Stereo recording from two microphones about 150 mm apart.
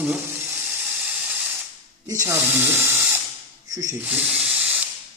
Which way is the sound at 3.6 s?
20° right (ahead or behind).